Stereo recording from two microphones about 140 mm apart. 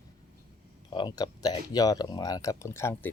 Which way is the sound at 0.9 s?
30° left (ahead or behind).